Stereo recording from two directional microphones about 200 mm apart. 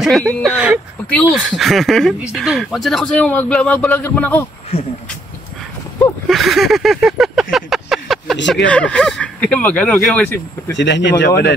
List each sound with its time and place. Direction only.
0.0 s a man's voice: centre (ahead or behind)
6.2 s a sound: centre (ahead or behind)
8.6 s a man's voice: 5° left (ahead or behind)
10.8 s speech: 65° left (ahead or behind)